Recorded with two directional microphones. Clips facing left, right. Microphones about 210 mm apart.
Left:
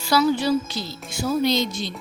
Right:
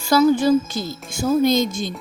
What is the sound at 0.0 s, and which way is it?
Speech, 50° right (ahead or behind).